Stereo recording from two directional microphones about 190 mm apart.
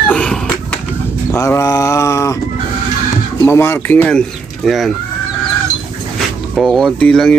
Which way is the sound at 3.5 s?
15° left (ahead or behind).